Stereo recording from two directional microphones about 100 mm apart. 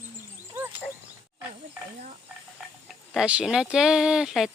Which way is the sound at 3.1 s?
10° right (ahead or behind).